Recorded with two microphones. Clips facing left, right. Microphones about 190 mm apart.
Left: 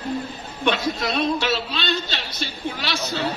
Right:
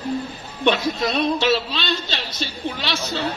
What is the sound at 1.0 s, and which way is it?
Speech, 25° right (ahead or behind).